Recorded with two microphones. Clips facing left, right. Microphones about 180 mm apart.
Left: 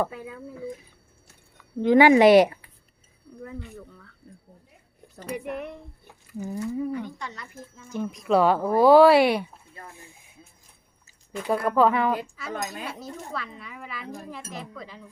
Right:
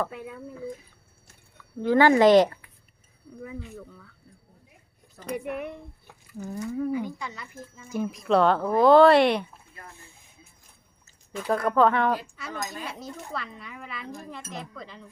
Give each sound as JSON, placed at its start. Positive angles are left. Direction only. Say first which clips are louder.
{"t": 0.1, "sound": "speech", "louder": "even", "side_deg": 0}
{"t": 1.8, "sound": "speech", "louder": "left 3 dB", "side_deg": 15}
{"t": 3.4, "sound": "speech", "louder": "even", "side_deg": -5}
{"t": 5.3, "sound": "speech", "louder": "right 1 dB", "side_deg": -5}
{"t": 6.9, "sound": "speech", "louder": "right 2 dB", "side_deg": -5}
{"t": 11.3, "sound": "speech", "louder": "left 1 dB", "side_deg": 5}